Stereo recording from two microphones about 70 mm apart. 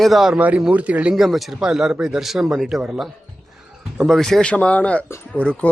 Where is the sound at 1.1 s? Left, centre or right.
Centre.